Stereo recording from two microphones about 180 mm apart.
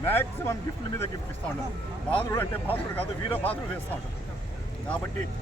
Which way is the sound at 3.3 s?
30° left (ahead or behind).